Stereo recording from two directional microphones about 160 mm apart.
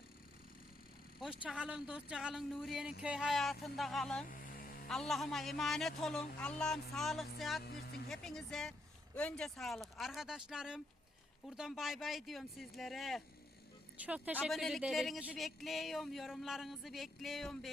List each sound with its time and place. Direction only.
1.2 s speech: 5° right (ahead or behind)
4.3 s music: 60° left (ahead or behind)
4.9 s speech: centre (ahead or behind)